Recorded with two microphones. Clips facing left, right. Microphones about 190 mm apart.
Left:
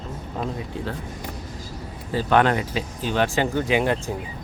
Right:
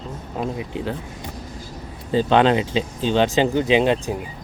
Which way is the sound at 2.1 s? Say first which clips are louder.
Right 3 dB; 20° right (ahead or behind).